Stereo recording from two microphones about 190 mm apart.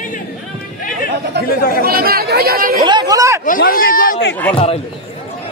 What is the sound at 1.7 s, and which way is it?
Speech, 50° right (ahead or behind).